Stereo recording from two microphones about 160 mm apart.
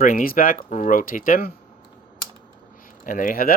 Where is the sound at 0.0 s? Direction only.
60° left (ahead or behind).